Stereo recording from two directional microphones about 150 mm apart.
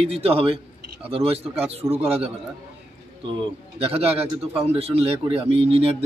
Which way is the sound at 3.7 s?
40° right (ahead or behind).